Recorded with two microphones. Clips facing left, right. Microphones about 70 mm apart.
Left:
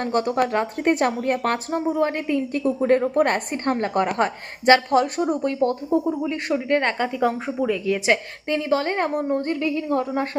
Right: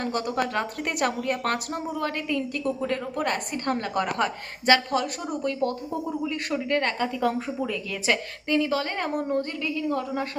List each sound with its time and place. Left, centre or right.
0.0 s speech: left
6.1 s speech: centre